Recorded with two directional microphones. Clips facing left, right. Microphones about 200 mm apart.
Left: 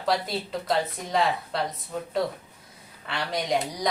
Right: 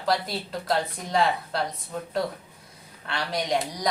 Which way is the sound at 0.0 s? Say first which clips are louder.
Even; centre (ahead or behind).